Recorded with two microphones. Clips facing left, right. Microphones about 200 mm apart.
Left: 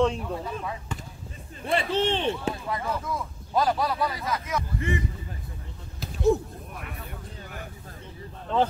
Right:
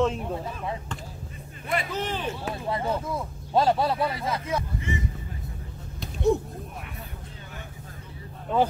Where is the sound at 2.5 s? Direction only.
30° right (ahead or behind).